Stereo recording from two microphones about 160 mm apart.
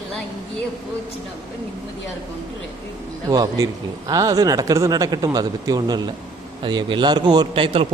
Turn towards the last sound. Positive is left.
turn(degrees=-35)  # may be behind; listen again after turning